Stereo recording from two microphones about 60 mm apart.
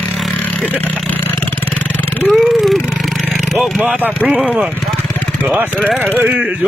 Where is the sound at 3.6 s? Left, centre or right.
Centre.